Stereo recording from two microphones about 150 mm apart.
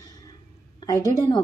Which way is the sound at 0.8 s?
25° left (ahead or behind).